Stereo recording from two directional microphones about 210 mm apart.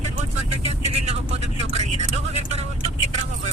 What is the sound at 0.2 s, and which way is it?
Vehicle, 30° right (ahead or behind).